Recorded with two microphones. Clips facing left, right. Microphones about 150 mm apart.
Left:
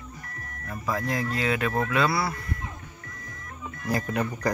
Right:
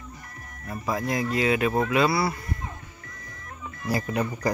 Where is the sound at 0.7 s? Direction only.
15° right (ahead or behind).